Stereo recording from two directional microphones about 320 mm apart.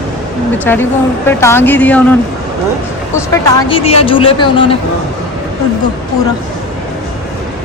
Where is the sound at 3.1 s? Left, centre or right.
Centre.